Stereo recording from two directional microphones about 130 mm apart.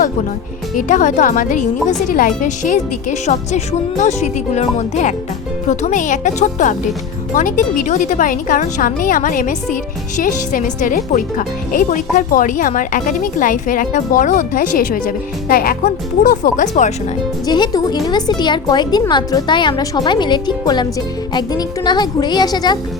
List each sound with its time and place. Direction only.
0.8 s a woman's voice: 85° left; by 5.1 s 60° left (ahead or behind)
5.6 s a woman's voice: 75° left (ahead or behind)
10.2 s speech: 90° left; by 16.9 s 70° left (ahead or behind)
17.4 s speech: 30° left (ahead or behind)